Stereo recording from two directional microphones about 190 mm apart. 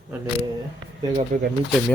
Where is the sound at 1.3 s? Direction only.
40° right (ahead or behind).